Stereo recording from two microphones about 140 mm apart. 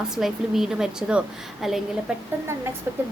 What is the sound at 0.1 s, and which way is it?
A woman's voice, centre (ahead or behind).